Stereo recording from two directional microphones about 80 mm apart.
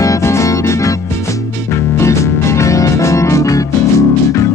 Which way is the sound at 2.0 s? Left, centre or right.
Left.